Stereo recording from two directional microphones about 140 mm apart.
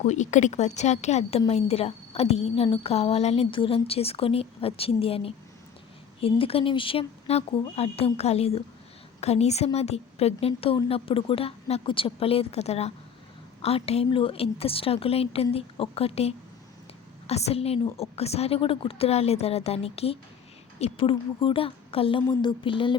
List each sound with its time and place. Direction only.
0.1 s a woman's voice: 60° left (ahead or behind); by 23.0 s 35° left (ahead or behind)